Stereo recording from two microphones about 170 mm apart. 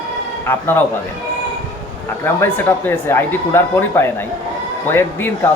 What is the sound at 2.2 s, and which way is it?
Speech, 15° left (ahead or behind).